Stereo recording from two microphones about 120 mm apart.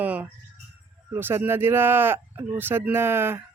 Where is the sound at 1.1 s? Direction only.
20° right (ahead or behind).